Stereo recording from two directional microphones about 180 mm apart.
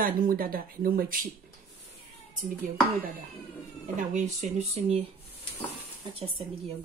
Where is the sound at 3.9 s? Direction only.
40° right (ahead or behind).